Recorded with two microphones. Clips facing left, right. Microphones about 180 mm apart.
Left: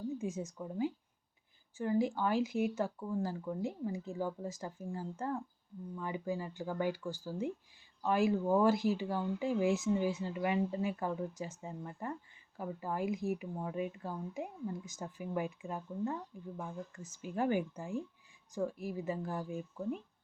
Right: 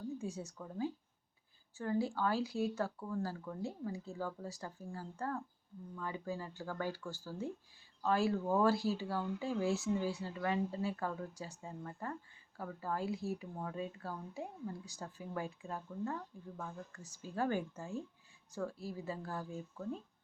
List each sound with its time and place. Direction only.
0.1 s speech: 15° left (ahead or behind)